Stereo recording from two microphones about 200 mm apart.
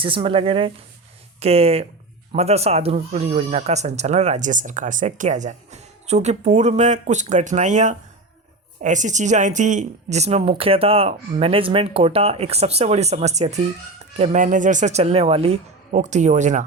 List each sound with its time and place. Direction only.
0.0 s speech: 25° right (ahead or behind)